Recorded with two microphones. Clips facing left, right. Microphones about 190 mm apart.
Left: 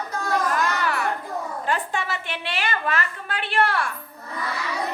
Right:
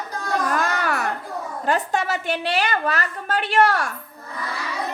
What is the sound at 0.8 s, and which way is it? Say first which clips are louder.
A woman's voice: even; 45° right (ahead or behind).